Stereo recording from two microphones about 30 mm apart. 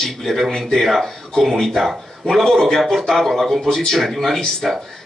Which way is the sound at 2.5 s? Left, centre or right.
Centre.